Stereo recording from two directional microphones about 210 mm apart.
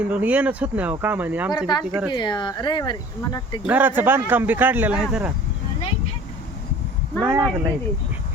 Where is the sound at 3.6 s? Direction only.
10° right (ahead or behind).